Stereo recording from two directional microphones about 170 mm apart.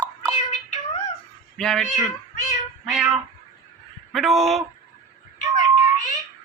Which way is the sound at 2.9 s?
Centre (ahead or behind).